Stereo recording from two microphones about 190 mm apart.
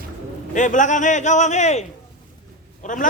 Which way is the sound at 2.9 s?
40° left (ahead or behind).